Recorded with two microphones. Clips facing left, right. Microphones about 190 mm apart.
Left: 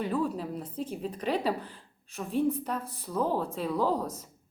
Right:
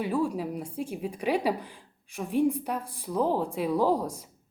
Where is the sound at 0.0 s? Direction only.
10° right (ahead or behind).